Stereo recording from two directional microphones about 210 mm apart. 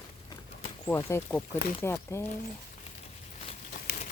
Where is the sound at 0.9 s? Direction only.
10° left (ahead or behind).